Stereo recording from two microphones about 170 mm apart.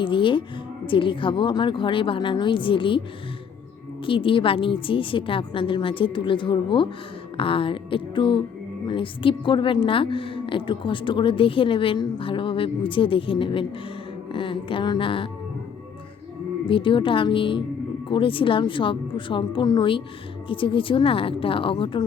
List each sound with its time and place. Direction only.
0.0 s a woman's voice: 30° left (ahead or behind)
4.0 s a woman's voice: 30° left (ahead or behind)
7.3 s music: 30° left (ahead or behind)
8.9 s a woman's voice: 30° left (ahead or behind)
16.6 s a woman's voice: 30° left (ahead or behind)